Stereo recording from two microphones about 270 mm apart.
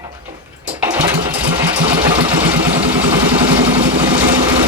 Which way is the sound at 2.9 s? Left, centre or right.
Centre.